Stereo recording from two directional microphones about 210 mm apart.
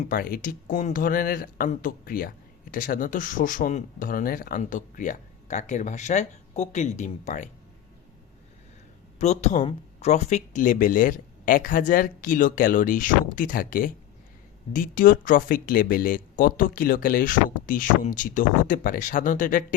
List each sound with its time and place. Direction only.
0.0 s speech: 40° left (ahead or behind)
9.1 s speech: 35° left (ahead or behind)